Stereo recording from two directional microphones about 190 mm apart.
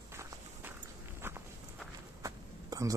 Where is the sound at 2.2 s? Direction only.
15° right (ahead or behind).